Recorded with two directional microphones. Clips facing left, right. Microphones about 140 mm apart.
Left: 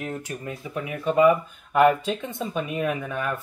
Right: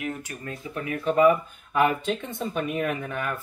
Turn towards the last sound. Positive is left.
turn(degrees=15)  # may be behind; listen again after turning